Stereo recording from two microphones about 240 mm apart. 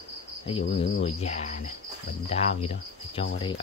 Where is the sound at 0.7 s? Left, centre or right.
Left.